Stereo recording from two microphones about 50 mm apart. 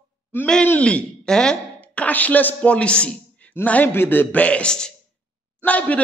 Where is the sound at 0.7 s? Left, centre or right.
Left.